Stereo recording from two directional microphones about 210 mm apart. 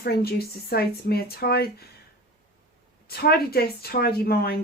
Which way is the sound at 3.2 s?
50° left (ahead or behind).